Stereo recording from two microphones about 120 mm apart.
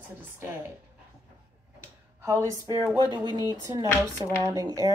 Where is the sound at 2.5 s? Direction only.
30° right (ahead or behind).